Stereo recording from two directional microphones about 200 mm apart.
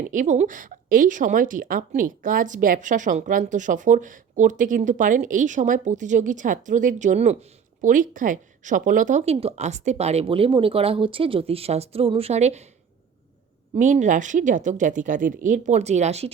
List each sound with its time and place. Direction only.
0.1 s a woman's voice: 40° right (ahead or behind)
13.7 s a woman's voice: 40° right (ahead or behind)